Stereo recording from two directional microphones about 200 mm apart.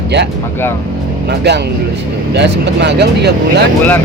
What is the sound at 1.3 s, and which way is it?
Speech, 60° right (ahead or behind).